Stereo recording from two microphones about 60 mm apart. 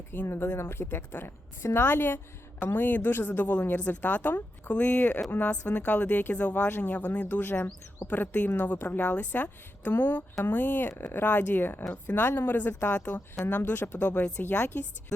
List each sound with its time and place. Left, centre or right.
0.1 s a woman's voice: left